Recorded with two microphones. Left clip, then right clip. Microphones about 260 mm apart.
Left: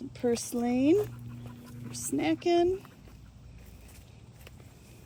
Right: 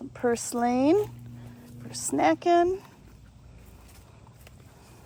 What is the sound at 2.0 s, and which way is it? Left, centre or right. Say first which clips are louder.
Speech: right 5 dB; centre.